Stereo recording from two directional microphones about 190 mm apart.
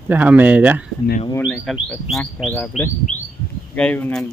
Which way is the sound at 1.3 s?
15° left (ahead or behind).